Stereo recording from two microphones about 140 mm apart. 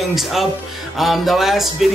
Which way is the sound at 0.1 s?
Centre (ahead or behind).